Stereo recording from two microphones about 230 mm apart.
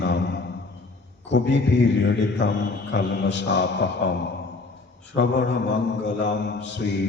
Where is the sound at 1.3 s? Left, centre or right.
Left.